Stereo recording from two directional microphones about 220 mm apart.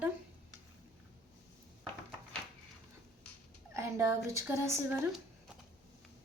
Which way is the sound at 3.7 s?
10° right (ahead or behind).